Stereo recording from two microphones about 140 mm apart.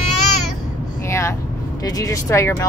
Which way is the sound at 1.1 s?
20° left (ahead or behind).